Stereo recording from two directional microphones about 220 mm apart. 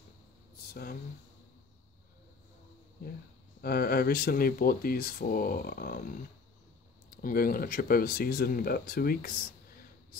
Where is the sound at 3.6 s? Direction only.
45° left (ahead or behind).